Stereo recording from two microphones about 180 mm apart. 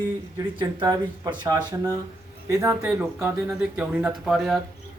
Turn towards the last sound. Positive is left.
turn(degrees=0)  # may be behind; listen again after turning